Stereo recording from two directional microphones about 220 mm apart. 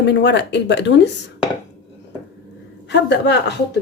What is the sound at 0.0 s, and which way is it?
Speech, 55° left (ahead or behind).